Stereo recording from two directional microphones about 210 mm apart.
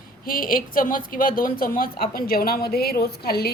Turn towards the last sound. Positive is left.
turn(degrees=50)  # may be behind; listen again after turning